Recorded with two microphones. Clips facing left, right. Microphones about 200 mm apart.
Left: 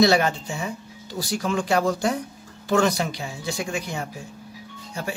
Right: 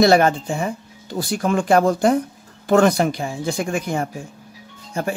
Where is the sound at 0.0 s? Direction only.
50° right (ahead or behind).